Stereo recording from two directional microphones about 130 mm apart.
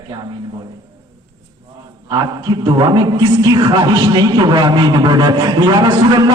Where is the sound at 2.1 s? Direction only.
30° right (ahead or behind).